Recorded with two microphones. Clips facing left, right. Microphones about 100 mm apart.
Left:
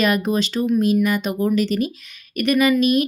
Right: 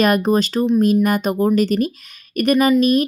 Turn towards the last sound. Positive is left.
turn(degrees=-40)  # may be behind; listen again after turning